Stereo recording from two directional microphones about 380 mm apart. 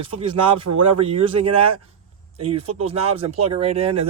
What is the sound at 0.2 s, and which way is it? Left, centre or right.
Speech, centre.